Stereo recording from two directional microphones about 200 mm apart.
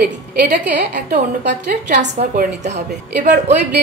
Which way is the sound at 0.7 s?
55° right (ahead or behind).